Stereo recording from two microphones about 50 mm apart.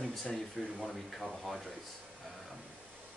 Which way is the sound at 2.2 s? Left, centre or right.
Centre.